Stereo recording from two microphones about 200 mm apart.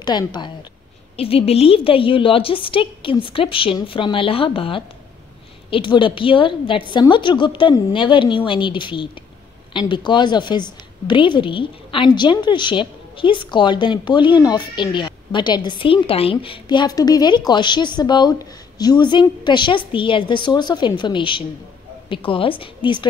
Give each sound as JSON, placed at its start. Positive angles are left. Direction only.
{"t": 0.0, "sound": "a woman's voice", "side_deg": 20}